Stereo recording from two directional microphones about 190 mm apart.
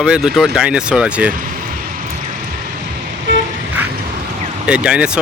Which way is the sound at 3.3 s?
75° right (ahead or behind).